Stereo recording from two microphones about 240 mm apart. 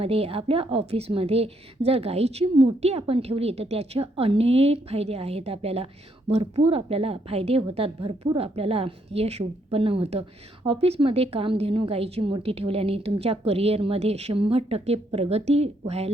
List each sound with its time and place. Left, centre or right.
0.0 s a woman's voice: right